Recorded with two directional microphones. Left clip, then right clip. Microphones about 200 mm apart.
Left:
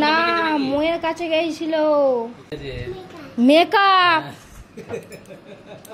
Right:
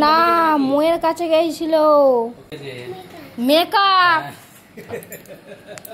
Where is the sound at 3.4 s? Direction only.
35° left (ahead or behind).